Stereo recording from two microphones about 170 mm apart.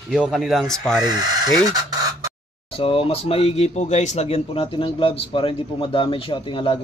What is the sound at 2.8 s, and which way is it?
Speech, 35° left (ahead or behind).